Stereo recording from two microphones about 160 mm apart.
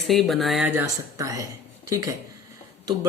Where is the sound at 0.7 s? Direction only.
15° right (ahead or behind).